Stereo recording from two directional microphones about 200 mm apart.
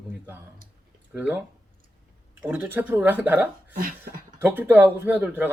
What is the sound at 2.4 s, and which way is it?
Speech, 10° right (ahead or behind).